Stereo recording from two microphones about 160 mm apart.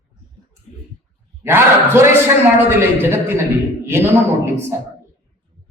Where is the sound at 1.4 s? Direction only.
15° right (ahead or behind).